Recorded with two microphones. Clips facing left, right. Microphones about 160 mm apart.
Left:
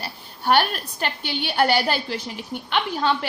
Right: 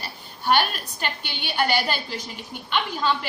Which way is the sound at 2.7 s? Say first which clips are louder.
Left 2 dB; 55° left (ahead or behind).